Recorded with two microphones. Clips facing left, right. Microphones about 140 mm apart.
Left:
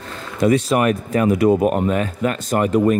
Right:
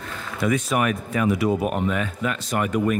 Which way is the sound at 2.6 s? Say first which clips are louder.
Left 6 dB; 30° left (ahead or behind).